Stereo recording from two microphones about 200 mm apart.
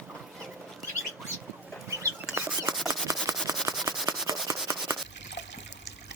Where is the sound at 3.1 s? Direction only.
15° right (ahead or behind).